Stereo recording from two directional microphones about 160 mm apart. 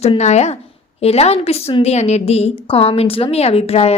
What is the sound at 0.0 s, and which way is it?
A woman's voice, 40° left (ahead or behind).